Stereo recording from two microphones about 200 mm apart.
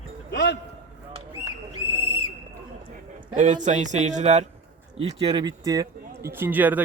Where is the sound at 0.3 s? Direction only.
55° left (ahead or behind).